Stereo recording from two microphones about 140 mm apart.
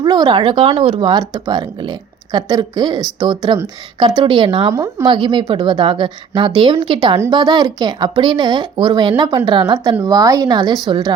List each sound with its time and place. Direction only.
0.0 s a woman's voice: 30° right (ahead or behind)
4.7 s speech: 20° right (ahead or behind)
5.0 s a woman's voice: 35° right (ahead or behind)